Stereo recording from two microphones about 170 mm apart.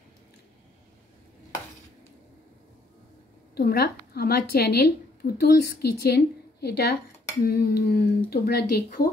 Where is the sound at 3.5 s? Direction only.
65° left (ahead or behind).